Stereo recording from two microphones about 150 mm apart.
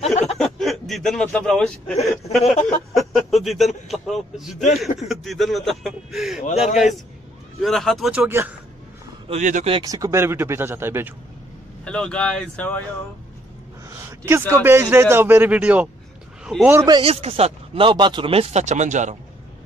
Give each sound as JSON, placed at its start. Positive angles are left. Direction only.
{"t": 0.0, "sound": "a sound", "side_deg": 45}
{"t": 0.4, "sound": "speech", "side_deg": 0}
{"t": 2.9, "sound": "a sound", "side_deg": 0}
{"t": 4.7, "sound": "speech", "side_deg": 0}
{"t": 8.3, "sound": "a man's voice", "side_deg": -15}
{"t": 9.3, "sound": "speech", "side_deg": -55}
{"t": 9.8, "sound": "a man's voice", "side_deg": -20}
{"t": 11.8, "sound": "speech", "side_deg": 5}
{"t": 13.8, "sound": "a sound", "side_deg": -15}
{"t": 14.5, "sound": "a man's voice", "side_deg": -15}
{"t": 16.5, "sound": "speech", "side_deg": 5}
{"t": 17.0, "sound": "speech", "side_deg": -40}